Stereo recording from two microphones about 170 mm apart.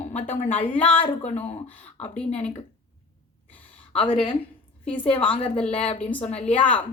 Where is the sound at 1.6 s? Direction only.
10° left (ahead or behind).